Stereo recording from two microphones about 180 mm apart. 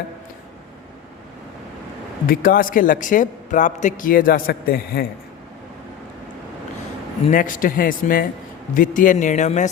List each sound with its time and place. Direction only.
2.2 s a man's voice: 50° left (ahead or behind)
7.3 s a man's voice: 50° left (ahead or behind)